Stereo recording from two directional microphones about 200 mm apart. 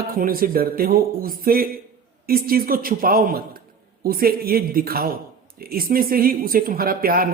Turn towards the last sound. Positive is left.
turn(degrees=-45)  # may be behind; listen again after turning